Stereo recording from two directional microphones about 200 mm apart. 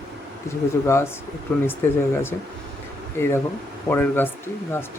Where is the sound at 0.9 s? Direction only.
15° left (ahead or behind).